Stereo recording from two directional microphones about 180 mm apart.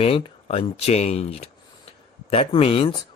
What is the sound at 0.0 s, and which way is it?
Speech, 30° left (ahead or behind).